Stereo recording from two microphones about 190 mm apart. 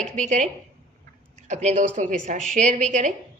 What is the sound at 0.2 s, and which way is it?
A woman's voice, 40° right (ahead or behind).